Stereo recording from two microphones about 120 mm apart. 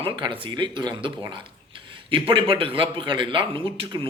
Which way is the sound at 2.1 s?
45° right (ahead or behind).